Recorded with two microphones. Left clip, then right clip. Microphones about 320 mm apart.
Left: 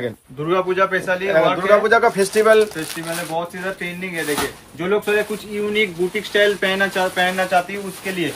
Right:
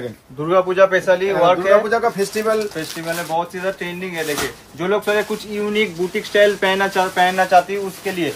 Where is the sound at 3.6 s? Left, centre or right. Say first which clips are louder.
Right 2 dB; centre.